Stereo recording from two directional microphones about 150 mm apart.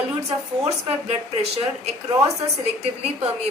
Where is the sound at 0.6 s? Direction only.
40° right (ahead or behind).